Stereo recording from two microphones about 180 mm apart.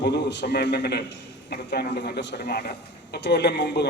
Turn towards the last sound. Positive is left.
turn(degrees=70)  # may be behind; listen again after turning